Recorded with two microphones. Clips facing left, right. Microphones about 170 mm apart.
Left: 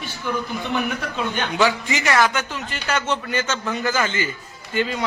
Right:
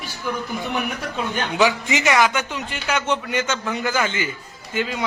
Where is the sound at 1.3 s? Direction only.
15° right (ahead or behind).